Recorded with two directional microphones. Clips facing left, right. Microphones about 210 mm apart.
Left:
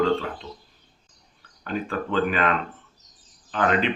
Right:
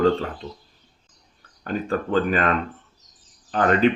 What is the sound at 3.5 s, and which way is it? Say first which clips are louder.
Speech: right 4 dB; 40° right (ahead or behind).